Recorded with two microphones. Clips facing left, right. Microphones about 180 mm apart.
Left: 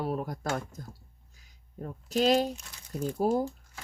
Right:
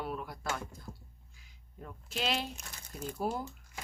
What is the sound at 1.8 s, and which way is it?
Speech, 40° left (ahead or behind).